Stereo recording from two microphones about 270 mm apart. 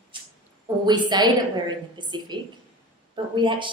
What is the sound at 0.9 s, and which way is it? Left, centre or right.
A woman's voice, centre.